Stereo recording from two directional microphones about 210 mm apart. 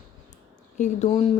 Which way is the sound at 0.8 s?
30° left (ahead or behind).